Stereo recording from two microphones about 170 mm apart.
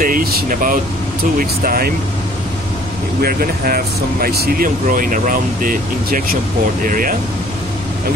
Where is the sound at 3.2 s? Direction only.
60° right (ahead or behind).